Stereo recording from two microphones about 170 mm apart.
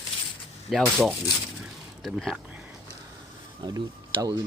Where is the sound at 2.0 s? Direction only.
Centre (ahead or behind).